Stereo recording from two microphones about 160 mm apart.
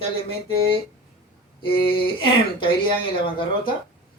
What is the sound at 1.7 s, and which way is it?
A man's voice, 30° left (ahead or behind).